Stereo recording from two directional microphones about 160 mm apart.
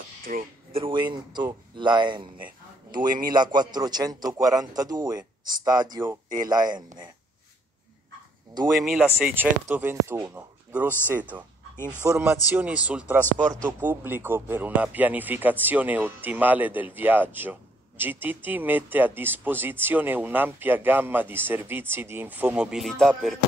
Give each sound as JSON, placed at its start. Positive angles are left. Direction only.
{"t": 0.2, "sound": "speech", "side_deg": -60}
{"t": 0.7, "sound": "a man's voice", "side_deg": -30}
{"t": 8.8, "sound": "speech", "side_deg": 0}